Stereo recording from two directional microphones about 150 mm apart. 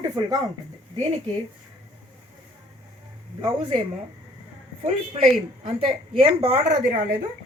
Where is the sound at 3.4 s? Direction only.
35° right (ahead or behind).